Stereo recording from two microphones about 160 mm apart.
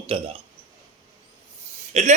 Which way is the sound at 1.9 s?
45° right (ahead or behind).